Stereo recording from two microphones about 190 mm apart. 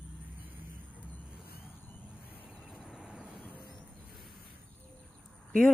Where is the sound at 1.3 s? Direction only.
55° left (ahead or behind).